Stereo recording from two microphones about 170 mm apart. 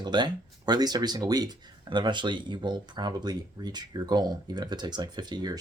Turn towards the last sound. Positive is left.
turn(degrees=-25)  # may be behind; listen again after turning